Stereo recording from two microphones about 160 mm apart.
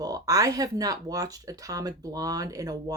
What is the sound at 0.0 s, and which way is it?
Speech, 20° right (ahead or behind).